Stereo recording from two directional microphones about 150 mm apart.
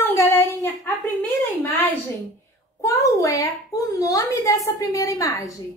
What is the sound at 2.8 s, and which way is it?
A child's voice, 20° left (ahead or behind).